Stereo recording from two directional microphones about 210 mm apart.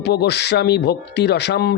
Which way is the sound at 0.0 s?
50° left (ahead or behind).